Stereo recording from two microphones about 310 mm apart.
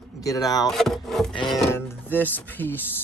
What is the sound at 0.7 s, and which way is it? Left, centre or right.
Wood, centre.